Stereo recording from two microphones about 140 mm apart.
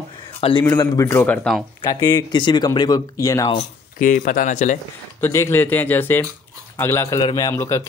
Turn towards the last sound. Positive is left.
turn(degrees=20)  # may be behind; listen again after turning